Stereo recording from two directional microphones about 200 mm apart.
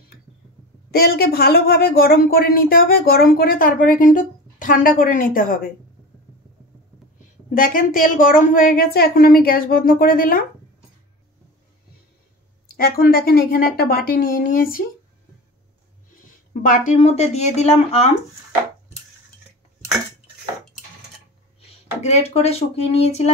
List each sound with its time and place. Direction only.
0.9 s speech: 50° left (ahead or behind)
7.5 s speech: 45° left (ahead or behind)
12.7 s speech: 45° left (ahead or behind)
16.6 s speech: 40° left (ahead or behind)
21.5 s speech: 30° left (ahead or behind)